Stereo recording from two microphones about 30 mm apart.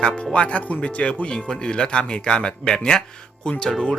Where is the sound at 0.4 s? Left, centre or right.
Left.